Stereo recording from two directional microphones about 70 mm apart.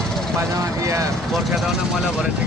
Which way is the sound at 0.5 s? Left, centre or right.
Right.